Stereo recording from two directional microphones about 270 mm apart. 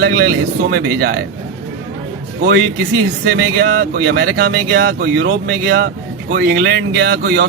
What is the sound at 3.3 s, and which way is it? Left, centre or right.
Speech, right.